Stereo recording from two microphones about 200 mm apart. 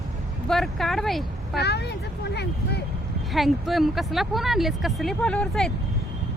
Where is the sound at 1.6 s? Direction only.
55° left (ahead or behind).